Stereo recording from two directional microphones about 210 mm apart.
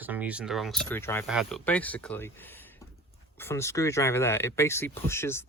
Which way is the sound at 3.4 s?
10° left (ahead or behind).